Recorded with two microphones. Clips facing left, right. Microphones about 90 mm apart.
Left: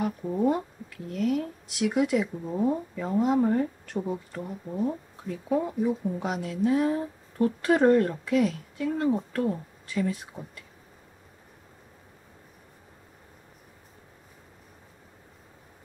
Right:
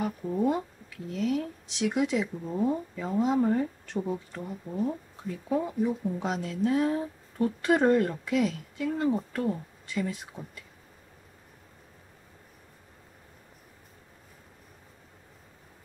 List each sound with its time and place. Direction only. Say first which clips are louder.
0.0 s speech: left 2 dB; 5° left (ahead or behind)